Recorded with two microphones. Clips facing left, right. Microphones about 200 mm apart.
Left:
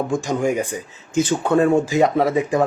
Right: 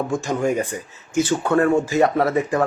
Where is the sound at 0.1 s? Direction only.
15° left (ahead or behind).